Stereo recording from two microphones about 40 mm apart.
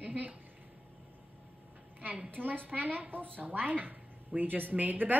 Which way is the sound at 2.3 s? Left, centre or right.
Right.